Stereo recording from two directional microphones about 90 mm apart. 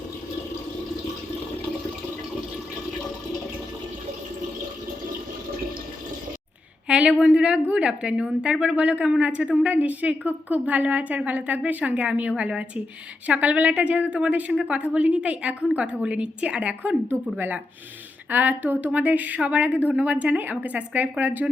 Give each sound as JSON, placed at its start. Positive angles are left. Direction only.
{"t": 6.8, "sound": "a woman's voice", "side_deg": -15}